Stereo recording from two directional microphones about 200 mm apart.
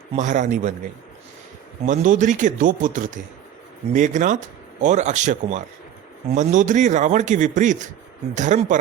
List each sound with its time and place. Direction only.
0.2 s speech: 35° right (ahead or behind)
1.9 s speech: 40° right (ahead or behind)